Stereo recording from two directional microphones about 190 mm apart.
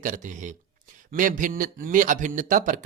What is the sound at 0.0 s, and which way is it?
A man's voice, 40° right (ahead or behind).